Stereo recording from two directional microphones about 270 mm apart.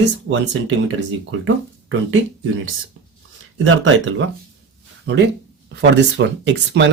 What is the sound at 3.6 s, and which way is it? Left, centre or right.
Speech, right.